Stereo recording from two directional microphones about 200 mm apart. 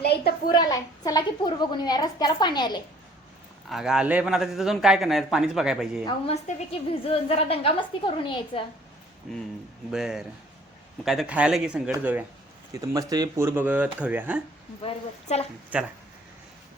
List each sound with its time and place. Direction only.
0.0 s a sound: 55° left (ahead or behind)
0.5 s a woman's voice: 20° left (ahead or behind)
3.7 s a man's voice: centre (ahead or behind)
6.1 s a woman's voice: 30° left (ahead or behind)
9.2 s a man's voice: centre (ahead or behind)
14.8 s a woman's voice: 30° left (ahead or behind)
15.7 s speech: 5° right (ahead or behind)